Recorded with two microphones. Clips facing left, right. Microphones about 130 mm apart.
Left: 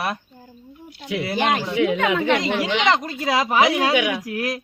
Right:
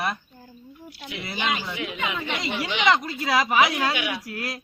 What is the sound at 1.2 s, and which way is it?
Speech, 70° left (ahead or behind).